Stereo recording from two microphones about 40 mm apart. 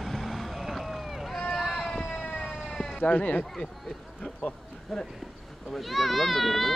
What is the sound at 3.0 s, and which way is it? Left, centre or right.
Speech, left.